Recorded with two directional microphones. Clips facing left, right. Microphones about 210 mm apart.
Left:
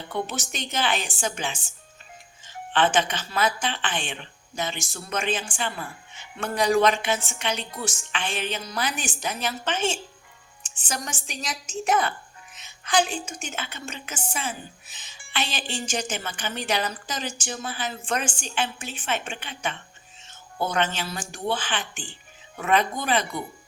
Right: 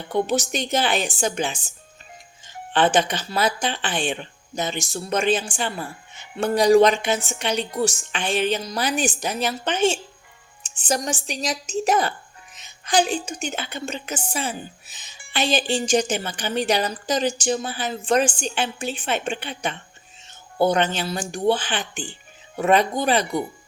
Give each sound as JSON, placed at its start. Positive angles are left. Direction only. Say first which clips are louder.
{"t": 0.1, "sound": "a woman's voice", "louder": "right 9 dB", "side_deg": -40}
{"t": 2.7, "sound": "a woman's voice", "louder": "right 3 dB", "side_deg": -35}